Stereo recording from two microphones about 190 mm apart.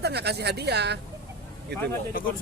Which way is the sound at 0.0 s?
60° right (ahead or behind).